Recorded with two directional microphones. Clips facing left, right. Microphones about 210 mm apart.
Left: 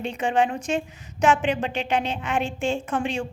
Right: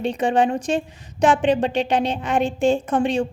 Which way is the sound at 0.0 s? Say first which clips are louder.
Right 4 dB; 35° right (ahead or behind).